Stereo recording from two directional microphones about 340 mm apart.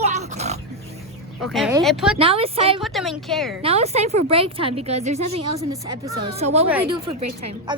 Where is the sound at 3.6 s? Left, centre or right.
Centre.